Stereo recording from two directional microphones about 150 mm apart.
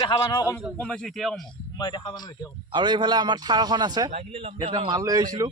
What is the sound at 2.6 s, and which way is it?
A man's voice, 30° right (ahead or behind).